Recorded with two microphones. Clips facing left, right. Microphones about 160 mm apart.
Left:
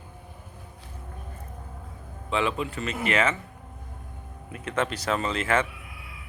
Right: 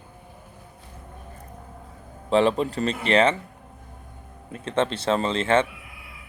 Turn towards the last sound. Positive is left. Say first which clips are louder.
# right 4 dB
turn(degrees=-30)  # may be behind; listen again after turning